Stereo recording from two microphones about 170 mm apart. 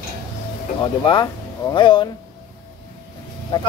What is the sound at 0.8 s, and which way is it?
Speech, 25° left (ahead or behind).